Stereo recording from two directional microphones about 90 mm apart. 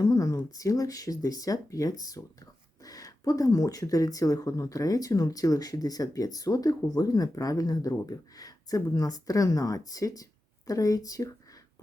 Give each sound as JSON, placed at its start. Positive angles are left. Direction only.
{"t": 0.0, "sound": "speech", "side_deg": 40}